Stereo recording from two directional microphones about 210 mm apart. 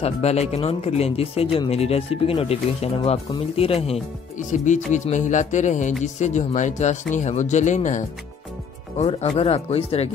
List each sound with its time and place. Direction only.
0.0 s speech: 30° left (ahead or behind)